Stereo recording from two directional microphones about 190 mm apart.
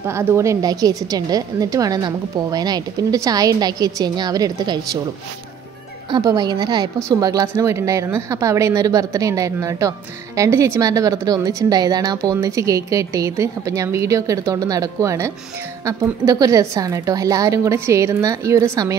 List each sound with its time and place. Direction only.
0.0 s a woman's voice: 10° right (ahead or behind)
6.0 s a woman's voice: 20° right (ahead or behind)